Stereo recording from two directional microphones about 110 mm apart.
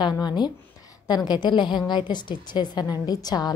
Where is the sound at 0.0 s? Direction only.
40° left (ahead or behind).